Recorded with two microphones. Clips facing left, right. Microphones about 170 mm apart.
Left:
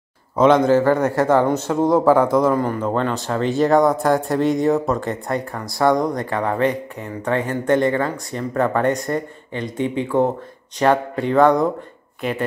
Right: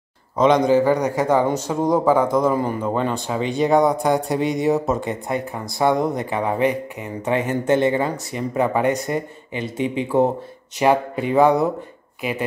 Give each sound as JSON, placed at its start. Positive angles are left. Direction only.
{"t": 0.7, "sound": "speech", "side_deg": -15}
{"t": 2.5, "sound": "speech", "side_deg": -10}
{"t": 5.5, "sound": "speech", "side_deg": -20}
{"t": 5.9, "sound": "speech", "side_deg": -5}